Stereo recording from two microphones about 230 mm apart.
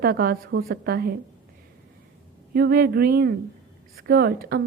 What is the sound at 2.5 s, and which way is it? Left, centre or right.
A woman's voice, right.